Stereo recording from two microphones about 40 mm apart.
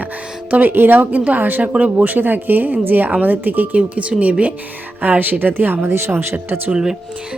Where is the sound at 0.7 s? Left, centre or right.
Right.